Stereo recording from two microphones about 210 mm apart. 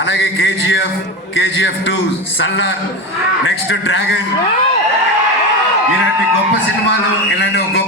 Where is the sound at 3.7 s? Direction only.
65° left (ahead or behind).